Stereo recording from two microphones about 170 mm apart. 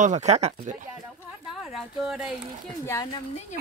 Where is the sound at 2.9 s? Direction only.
20° left (ahead or behind).